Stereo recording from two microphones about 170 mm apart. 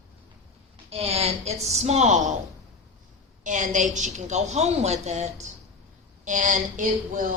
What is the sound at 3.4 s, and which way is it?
A woman's voice, 50° right (ahead or behind).